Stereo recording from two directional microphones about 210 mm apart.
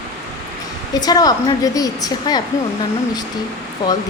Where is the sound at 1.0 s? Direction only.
20° left (ahead or behind).